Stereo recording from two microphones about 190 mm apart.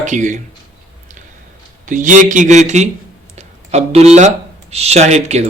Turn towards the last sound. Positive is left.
turn(degrees=-35)  # may be behind; listen again after turning